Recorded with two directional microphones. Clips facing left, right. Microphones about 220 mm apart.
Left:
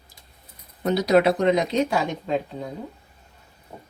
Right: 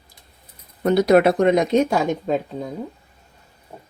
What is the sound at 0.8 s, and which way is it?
Speech, 55° right (ahead or behind).